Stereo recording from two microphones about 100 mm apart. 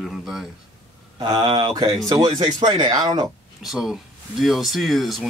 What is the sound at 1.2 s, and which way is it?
Speech, 50° right (ahead or behind).